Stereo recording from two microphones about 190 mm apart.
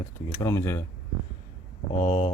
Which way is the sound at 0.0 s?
15° left (ahead or behind).